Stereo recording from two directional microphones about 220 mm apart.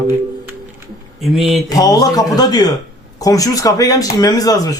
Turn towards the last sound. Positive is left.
turn(degrees=15)  # may be behind; listen again after turning